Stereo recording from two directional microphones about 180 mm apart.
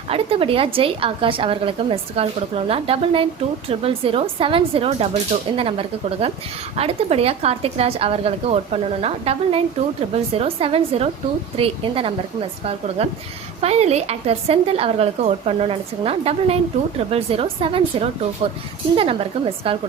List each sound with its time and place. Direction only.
0.1 s a woman's voice: 30° right (ahead or behind)